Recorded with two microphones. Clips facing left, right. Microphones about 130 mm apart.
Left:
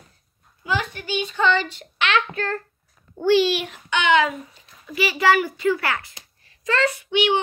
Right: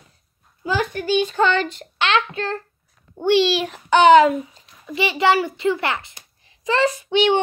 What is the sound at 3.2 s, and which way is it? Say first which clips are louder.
Speech: right 1 dB; 20° right (ahead or behind).